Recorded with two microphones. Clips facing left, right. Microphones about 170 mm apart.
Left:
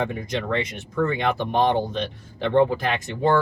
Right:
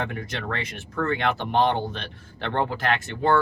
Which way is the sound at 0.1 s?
15° left (ahead or behind).